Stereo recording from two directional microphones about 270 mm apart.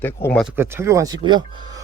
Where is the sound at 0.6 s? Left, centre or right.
Centre.